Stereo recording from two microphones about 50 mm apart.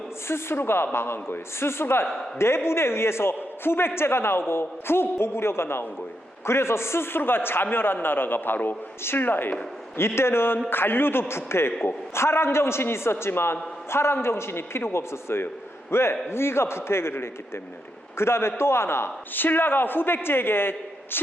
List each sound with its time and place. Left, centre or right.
0.3 s a man's voice: left
10.0 s a man's voice: left
19.3 s a man's voice: left